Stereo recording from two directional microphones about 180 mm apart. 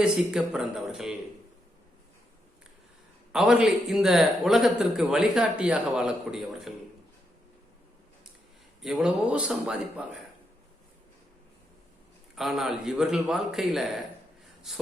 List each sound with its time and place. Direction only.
0.3 s a man's voice: 5° right (ahead or behind)
3.3 s a man's voice: 5° right (ahead or behind)
8.8 s a man's voice: 5° right (ahead or behind)
12.4 s a man's voice: centre (ahead or behind)
14.4 s a sound: centre (ahead or behind)